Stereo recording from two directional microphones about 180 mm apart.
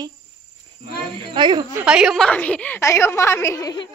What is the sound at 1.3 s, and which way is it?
Speech, 25° right (ahead or behind).